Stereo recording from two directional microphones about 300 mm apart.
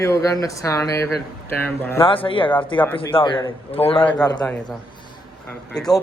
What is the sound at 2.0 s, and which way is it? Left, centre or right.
Speech, centre.